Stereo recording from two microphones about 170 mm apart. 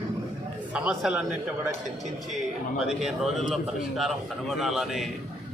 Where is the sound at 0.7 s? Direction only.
5° right (ahead or behind).